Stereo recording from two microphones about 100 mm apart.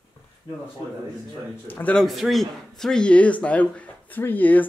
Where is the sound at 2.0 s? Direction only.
Centre (ahead or behind).